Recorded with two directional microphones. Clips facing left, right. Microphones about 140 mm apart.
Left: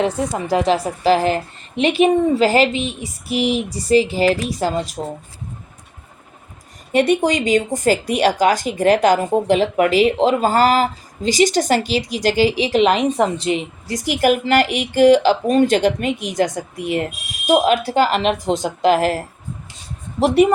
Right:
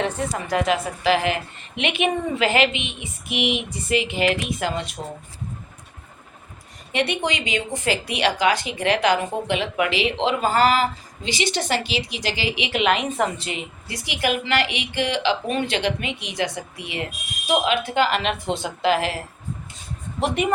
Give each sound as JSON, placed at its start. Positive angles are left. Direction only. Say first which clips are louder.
{"t": 0.5, "sound": "a woman's voice", "louder": "left 5 dB", "side_deg": 30}
{"t": 6.9, "sound": "a woman's voice", "louder": "left 8 dB", "side_deg": 40}